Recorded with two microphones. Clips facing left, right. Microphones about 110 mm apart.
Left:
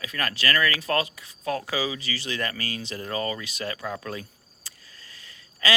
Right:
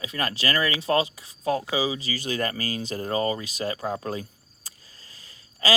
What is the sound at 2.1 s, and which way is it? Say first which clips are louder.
Speech: right 3 dB; 40° right (ahead or behind).